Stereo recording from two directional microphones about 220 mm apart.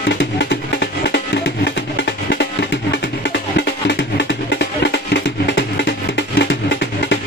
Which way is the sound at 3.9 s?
50° left (ahead or behind).